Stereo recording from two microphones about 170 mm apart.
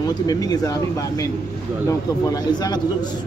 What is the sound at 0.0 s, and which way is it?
Speech, 20° left (ahead or behind).